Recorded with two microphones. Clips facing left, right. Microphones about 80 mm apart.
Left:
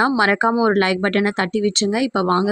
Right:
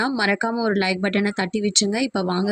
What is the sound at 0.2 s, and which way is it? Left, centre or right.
A woman's voice, left.